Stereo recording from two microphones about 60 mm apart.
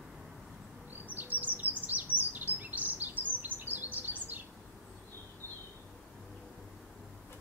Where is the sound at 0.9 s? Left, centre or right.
Right.